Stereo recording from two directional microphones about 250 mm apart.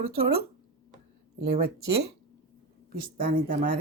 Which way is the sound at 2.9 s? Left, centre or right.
Right.